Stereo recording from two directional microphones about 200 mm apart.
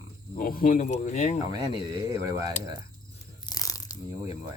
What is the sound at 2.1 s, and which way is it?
Speech, 15° right (ahead or behind).